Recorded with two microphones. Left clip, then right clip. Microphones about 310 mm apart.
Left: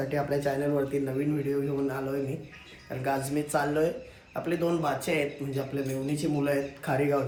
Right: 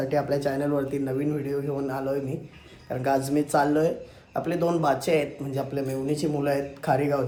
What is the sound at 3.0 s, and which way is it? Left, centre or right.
A man's voice, centre.